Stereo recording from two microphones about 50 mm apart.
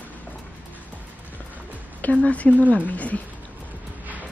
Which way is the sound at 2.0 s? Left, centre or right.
Left.